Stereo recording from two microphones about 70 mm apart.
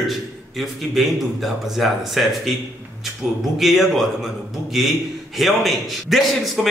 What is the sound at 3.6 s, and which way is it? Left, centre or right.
Speech, centre.